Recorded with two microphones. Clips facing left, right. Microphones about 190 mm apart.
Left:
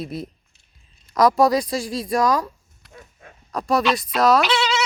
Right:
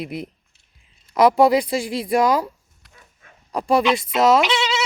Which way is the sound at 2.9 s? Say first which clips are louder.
Left 9 dB; 45° left (ahead or behind).